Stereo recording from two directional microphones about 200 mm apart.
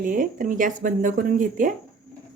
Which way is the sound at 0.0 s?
45° right (ahead or behind).